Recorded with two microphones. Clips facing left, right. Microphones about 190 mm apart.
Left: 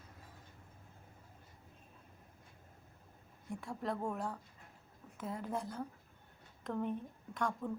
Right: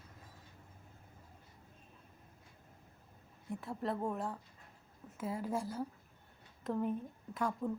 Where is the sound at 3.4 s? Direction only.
5° right (ahead or behind).